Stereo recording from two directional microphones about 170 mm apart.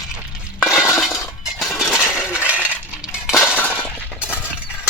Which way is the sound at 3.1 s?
5° right (ahead or behind).